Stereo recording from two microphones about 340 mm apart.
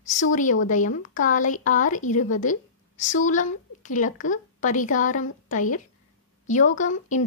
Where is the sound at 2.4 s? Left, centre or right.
Left.